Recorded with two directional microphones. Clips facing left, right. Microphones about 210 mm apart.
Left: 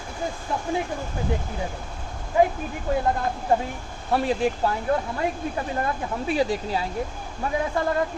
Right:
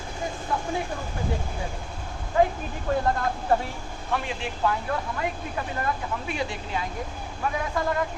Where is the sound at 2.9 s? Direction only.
15° left (ahead or behind).